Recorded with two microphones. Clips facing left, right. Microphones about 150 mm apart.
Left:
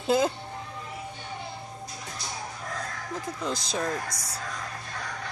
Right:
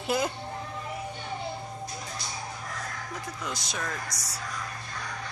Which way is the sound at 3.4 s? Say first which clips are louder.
Left 6 dB; 30° left (ahead or behind).